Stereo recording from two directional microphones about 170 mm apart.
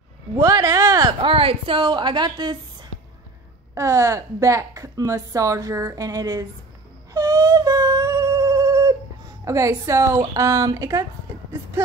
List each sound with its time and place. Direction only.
0.4 s speech: 20° right (ahead or behind)
1.2 s a woman's voice: 35° right (ahead or behind)
7.2 s a sound: 20° right (ahead or behind)
9.4 s a woman's voice: 20° right (ahead or behind)